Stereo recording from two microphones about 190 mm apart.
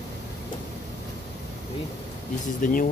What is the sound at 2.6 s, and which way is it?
Speech, 45° left (ahead or behind).